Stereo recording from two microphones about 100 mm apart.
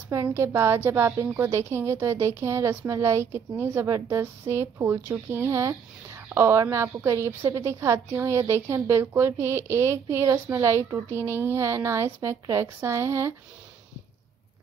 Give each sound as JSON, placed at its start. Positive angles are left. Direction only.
{"t": 0.1, "sound": "speech", "side_deg": -30}